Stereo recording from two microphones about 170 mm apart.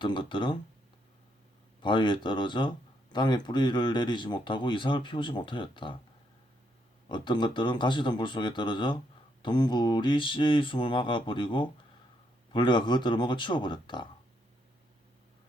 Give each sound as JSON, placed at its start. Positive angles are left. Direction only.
{"t": 0.0, "sound": "speech", "side_deg": 30}
{"t": 1.8, "sound": "speech", "side_deg": 30}
{"t": 7.1, "sound": "speech", "side_deg": 30}